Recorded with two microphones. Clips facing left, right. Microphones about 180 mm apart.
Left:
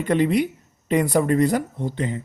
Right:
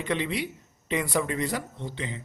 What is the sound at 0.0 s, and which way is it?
Speech, 45° left (ahead or behind).